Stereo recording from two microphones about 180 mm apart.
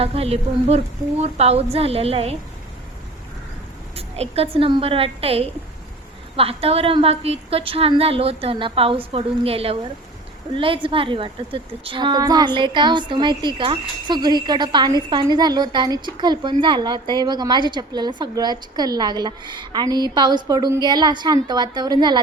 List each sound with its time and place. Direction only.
0.0 s a woman's voice: 35° right (ahead or behind)
3.9 s a woman's voice: 35° right (ahead or behind)